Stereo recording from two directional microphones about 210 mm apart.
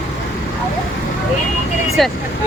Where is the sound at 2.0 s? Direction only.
Centre (ahead or behind).